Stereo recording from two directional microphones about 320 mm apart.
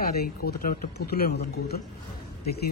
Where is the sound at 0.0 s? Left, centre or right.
Left.